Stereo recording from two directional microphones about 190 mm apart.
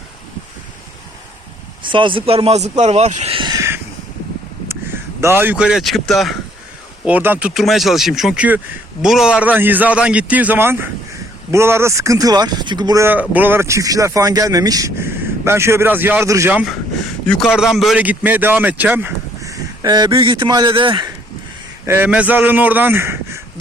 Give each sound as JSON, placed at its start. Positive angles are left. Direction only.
{"t": 1.8, "sound": "speech", "side_deg": -25}
{"t": 3.3, "sound": "a sound", "side_deg": -20}
{"t": 5.2, "sound": "speech", "side_deg": -10}
{"t": 17.2, "sound": "speech", "side_deg": 5}
{"t": 21.8, "sound": "speech", "side_deg": -10}